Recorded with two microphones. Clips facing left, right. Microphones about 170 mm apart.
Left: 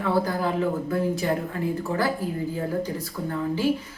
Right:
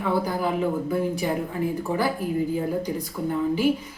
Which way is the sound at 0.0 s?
15° right (ahead or behind).